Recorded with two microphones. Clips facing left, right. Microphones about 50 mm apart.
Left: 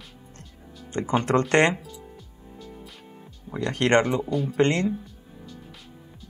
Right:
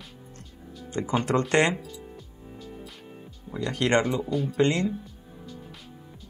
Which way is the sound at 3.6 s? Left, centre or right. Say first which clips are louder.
Left 3 dB; left.